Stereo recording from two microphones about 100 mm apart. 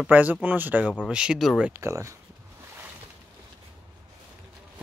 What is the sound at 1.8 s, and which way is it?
Speech, 30° right (ahead or behind).